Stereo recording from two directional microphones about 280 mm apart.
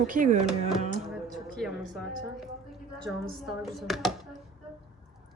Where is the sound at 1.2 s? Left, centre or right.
Centre.